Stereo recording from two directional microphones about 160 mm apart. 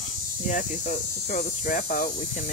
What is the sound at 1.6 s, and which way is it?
Speech, 55° left (ahead or behind).